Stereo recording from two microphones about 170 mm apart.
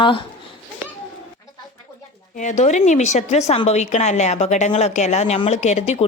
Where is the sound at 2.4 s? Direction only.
45° left (ahead or behind).